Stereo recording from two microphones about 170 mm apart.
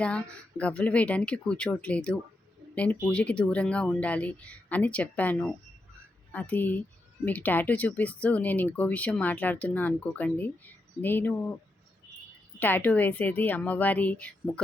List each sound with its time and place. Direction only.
0.0 s speech: 5° left (ahead or behind)
12.5 s speech: 10° left (ahead or behind)